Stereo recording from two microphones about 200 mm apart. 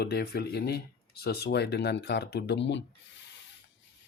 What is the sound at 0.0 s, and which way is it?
Speech, 50° left (ahead or behind).